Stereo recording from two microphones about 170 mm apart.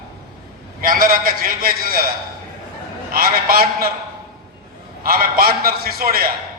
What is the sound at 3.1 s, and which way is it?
Speech, 60° right (ahead or behind).